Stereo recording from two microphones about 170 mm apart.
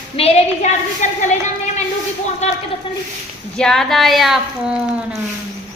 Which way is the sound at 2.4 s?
40° left (ahead or behind).